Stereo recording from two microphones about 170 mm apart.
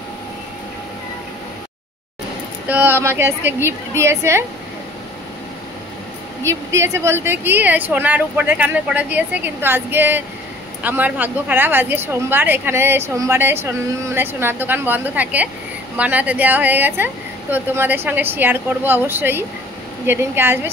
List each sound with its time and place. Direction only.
2.7 s a woman's voice: 10° right (ahead or behind)
6.5 s a woman's voice: 20° right (ahead or behind)